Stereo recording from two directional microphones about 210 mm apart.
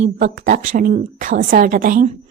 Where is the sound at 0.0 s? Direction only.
35° right (ahead or behind).